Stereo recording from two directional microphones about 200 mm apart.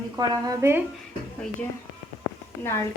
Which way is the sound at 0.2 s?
15° right (ahead or behind).